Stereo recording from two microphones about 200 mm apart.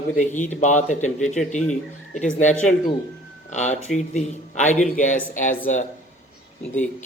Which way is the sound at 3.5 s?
35° left (ahead or behind).